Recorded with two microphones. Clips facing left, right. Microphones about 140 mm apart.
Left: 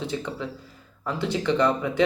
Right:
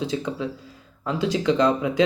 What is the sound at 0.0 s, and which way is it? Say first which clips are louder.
A man's voice: right 4 dB; 15° right (ahead or behind).